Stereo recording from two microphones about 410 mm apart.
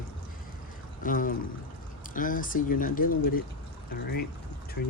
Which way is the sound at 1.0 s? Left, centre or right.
Centre.